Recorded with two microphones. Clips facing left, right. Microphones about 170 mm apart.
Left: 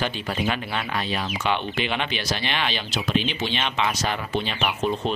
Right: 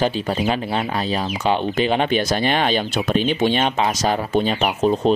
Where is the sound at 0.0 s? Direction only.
35° right (ahead or behind).